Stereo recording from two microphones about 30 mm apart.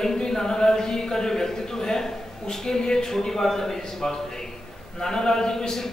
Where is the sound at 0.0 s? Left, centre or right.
Centre.